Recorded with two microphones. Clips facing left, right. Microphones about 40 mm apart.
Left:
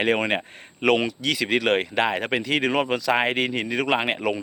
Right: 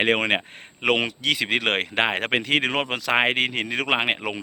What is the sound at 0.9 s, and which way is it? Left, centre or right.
Speech, right.